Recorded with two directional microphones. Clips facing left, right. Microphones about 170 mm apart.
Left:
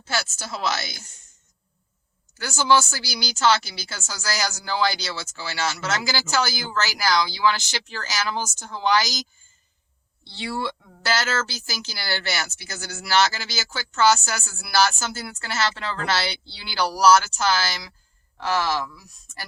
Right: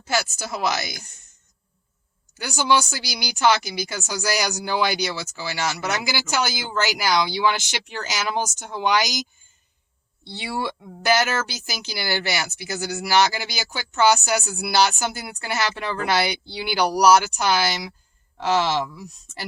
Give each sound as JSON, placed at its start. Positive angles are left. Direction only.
{"t": 0.0, "sound": "speech", "side_deg": -15}
{"t": 2.4, "sound": "speech", "side_deg": -15}
{"t": 10.3, "sound": "speech", "side_deg": -15}